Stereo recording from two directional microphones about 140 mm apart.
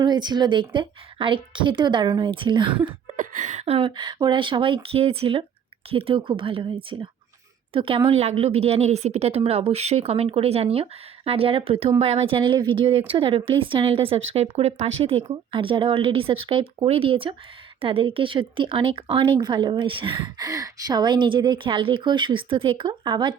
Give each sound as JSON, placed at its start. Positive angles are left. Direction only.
{"t": 0.0, "sound": "speech", "side_deg": -30}
{"t": 3.2, "sound": "a woman's voice", "side_deg": -65}
{"t": 20.5, "sound": "speech", "side_deg": -25}